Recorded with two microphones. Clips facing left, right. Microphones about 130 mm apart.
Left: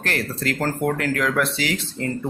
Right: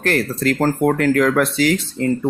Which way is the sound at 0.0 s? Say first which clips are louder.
Right 7 dB; 45° right (ahead or behind).